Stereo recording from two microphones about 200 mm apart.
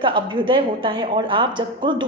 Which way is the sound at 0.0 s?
25° right (ahead or behind).